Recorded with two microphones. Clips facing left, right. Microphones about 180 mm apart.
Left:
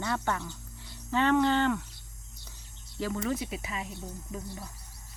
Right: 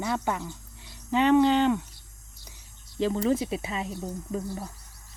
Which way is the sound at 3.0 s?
30° right (ahead or behind).